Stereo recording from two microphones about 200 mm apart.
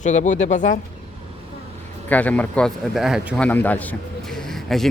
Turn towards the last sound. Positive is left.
turn(degrees=0)  # may be behind; listen again after turning